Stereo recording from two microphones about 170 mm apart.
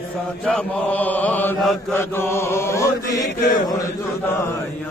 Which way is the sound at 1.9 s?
15° left (ahead or behind).